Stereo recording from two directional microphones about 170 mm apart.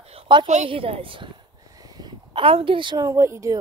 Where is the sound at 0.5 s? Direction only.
40° right (ahead or behind).